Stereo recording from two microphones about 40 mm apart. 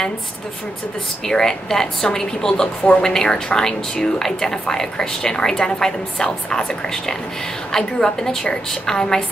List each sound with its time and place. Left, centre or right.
1.2 s speech: centre